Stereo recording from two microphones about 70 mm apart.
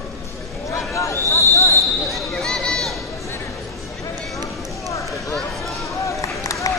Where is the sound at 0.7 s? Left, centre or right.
Left.